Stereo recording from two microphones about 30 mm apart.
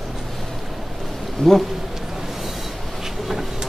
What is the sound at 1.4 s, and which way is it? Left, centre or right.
Speech, centre.